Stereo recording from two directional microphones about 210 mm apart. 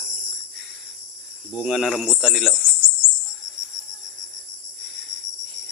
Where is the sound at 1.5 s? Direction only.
Centre (ahead or behind).